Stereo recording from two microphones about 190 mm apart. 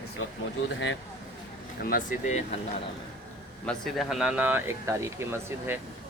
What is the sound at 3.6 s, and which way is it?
Speech, centre (ahead or behind).